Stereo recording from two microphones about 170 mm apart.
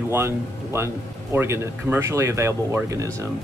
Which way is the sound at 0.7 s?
15° right (ahead or behind).